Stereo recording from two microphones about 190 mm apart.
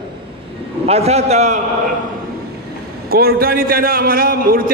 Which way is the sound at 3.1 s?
55° right (ahead or behind).